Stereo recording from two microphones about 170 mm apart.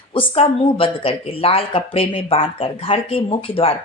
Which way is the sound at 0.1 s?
30° left (ahead or behind).